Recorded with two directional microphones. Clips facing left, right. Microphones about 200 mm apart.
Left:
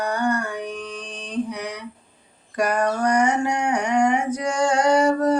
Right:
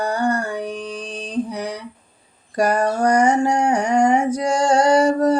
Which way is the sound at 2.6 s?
35° right (ahead or behind).